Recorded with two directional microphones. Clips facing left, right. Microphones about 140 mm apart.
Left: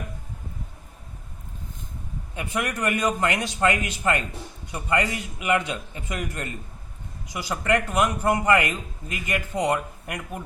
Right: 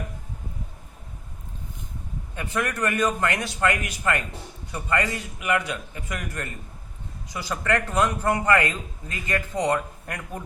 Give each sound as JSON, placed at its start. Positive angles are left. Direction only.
{"t": 2.3, "sound": "a man's voice", "side_deg": 15}